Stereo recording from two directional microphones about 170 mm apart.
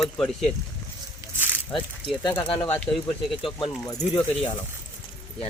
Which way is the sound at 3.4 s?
30° left (ahead or behind).